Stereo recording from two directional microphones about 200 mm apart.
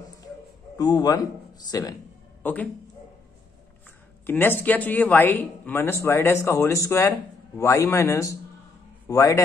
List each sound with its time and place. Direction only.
0.7 s speech: 20° left (ahead or behind)
2.4 s speech: 10° left (ahead or behind)
4.3 s a man's voice: 10° left (ahead or behind)